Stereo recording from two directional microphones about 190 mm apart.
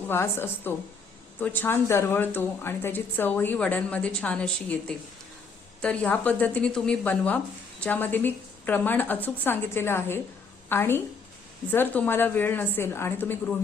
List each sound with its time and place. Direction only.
0.1 s a woman's voice: 10° left (ahead or behind)